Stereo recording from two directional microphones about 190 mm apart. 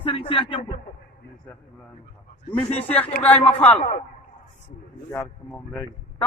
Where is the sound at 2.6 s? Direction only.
35° left (ahead or behind).